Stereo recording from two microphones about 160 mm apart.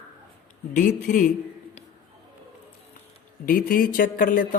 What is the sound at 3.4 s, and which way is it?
Speech, 60° left (ahead or behind).